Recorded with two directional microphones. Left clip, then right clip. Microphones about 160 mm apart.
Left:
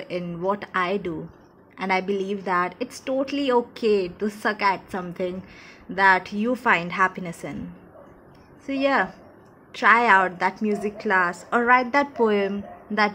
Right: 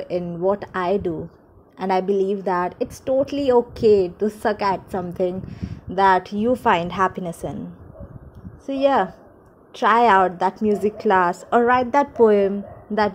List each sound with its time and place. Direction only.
0.0 s a woman's voice: 30° right (ahead or behind)
8.6 s a woman's voice: 30° right (ahead or behind)